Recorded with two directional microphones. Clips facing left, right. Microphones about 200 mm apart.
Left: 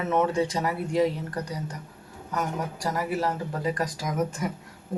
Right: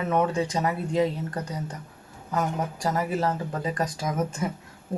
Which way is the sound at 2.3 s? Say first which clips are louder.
Right 2 dB; 25° right (ahead or behind).